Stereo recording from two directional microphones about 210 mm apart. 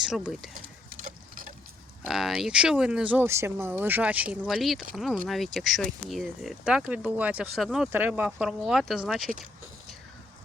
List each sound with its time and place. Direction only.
0.0 s speech: 5° right (ahead or behind)
0.5 s a sound: 40° right (ahead or behind)
2.0 s speech: centre (ahead or behind)